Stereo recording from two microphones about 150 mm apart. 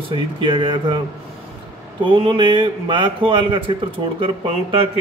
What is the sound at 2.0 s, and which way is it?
A man's voice, 35° right (ahead or behind).